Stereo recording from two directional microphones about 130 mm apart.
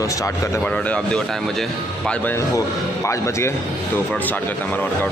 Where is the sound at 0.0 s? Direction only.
25° left (ahead or behind).